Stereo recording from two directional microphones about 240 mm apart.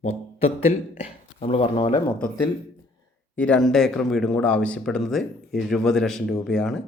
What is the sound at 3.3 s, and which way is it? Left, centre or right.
Speech, centre.